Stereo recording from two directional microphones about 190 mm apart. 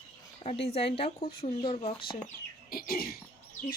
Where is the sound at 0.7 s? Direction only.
30° left (ahead or behind).